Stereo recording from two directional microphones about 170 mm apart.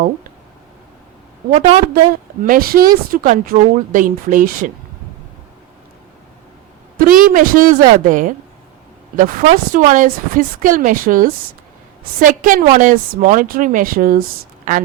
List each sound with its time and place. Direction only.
1.5 s a woman's voice: 40° right (ahead or behind)
2.4 s a woman's voice: 55° right (ahead or behind)
6.9 s a woman's voice: 55° right (ahead or behind)